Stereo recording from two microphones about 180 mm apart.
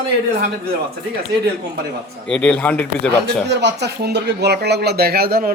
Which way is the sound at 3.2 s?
70° right (ahead or behind).